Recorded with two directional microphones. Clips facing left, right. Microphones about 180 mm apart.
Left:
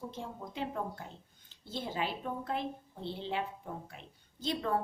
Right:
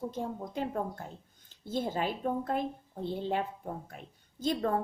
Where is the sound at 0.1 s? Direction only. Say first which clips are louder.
Right 6 dB; 45° right (ahead or behind).